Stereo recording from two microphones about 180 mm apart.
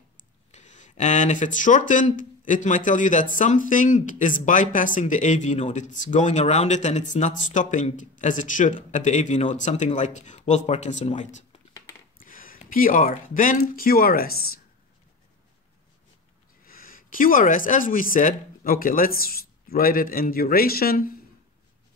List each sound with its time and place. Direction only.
0.5 s speech: 40° left (ahead or behind); by 14.6 s 55° left (ahead or behind)
16.6 s a man's voice: 50° left (ahead or behind)